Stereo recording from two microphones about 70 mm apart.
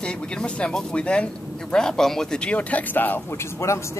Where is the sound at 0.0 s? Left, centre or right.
Centre.